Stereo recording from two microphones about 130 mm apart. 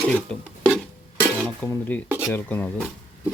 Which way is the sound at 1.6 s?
15° left (ahead or behind).